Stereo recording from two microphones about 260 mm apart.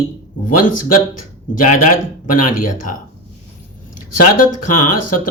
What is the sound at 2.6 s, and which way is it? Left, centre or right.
Speech, left.